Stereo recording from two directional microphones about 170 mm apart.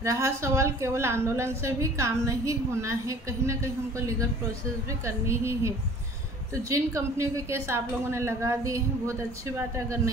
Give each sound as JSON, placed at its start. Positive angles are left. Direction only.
{"t": 0.0, "sound": "a woman's voice", "side_deg": -15}